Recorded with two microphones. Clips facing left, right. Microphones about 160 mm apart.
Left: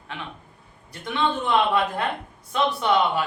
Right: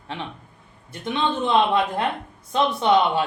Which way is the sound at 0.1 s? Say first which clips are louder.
Right 3 dB; 30° right (ahead or behind).